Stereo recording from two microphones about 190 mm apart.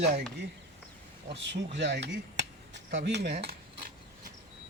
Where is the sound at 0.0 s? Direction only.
50° right (ahead or behind).